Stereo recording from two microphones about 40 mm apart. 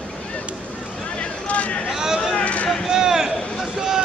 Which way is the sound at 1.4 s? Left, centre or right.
Left.